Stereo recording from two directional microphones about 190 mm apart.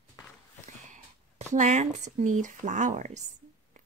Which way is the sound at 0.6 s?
40° right (ahead or behind).